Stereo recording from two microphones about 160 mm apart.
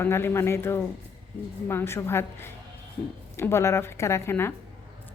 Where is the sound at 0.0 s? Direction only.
15° left (ahead or behind).